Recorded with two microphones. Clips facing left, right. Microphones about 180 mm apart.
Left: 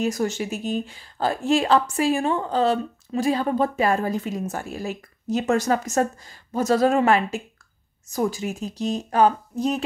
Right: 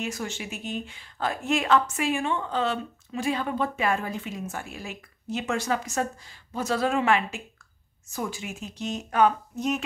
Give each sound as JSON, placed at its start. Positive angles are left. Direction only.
{"t": 0.0, "sound": "speech", "side_deg": 40}